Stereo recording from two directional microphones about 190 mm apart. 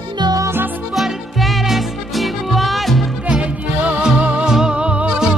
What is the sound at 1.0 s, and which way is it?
Music, centre (ahead or behind).